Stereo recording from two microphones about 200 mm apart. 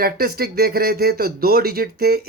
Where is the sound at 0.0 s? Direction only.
50° right (ahead or behind).